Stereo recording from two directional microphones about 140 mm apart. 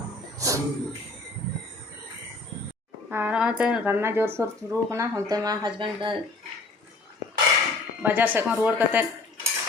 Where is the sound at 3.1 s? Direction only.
15° right (ahead or behind); by 6.2 s 35° right (ahead or behind).